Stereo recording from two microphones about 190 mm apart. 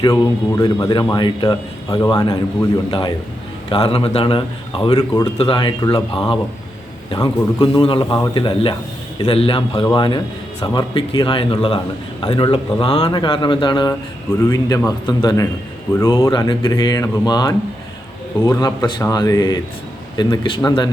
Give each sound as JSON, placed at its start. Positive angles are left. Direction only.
{"t": 0.0, "sound": "speech", "side_deg": 20}